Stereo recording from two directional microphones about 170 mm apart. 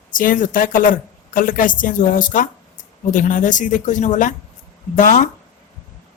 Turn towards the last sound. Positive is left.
turn(degrees=50)  # may be behind; listen again after turning